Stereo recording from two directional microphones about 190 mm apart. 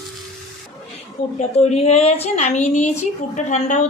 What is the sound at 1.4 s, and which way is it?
A woman's voice, 35° left (ahead or behind).